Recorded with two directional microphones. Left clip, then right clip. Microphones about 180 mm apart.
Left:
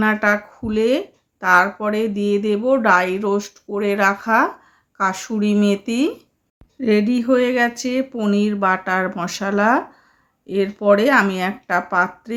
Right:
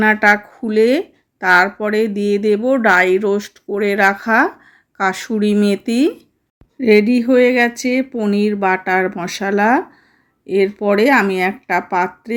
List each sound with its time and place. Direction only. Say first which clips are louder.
0.0 s speech: right 5 dB; 20° right (ahead or behind)